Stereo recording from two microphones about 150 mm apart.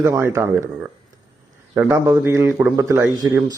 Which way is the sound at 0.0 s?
20° right (ahead or behind).